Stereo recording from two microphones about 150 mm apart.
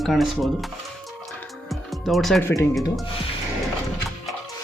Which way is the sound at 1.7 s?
Centre (ahead or behind).